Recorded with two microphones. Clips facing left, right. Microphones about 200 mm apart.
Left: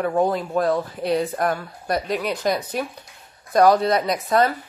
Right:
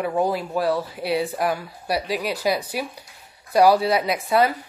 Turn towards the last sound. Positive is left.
turn(degrees=-5)  # may be behind; listen again after turning